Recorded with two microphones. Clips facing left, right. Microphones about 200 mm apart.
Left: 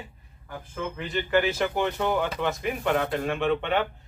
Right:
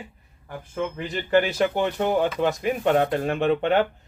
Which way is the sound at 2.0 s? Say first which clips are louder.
Right 4 dB; 35° right (ahead or behind).